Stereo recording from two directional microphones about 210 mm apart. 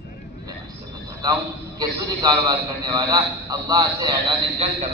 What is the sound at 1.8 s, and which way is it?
A man's voice, 15° right (ahead or behind).